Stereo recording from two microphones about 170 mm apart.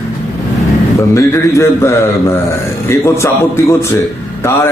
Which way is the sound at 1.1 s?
15° left (ahead or behind).